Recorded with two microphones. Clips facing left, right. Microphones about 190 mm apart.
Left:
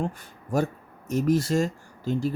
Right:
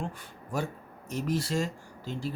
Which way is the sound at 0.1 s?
45° left (ahead or behind).